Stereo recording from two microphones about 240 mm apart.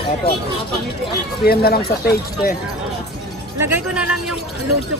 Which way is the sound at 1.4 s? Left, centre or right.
Left.